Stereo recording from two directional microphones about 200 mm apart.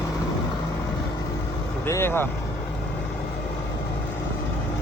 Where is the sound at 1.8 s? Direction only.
15° left (ahead or behind).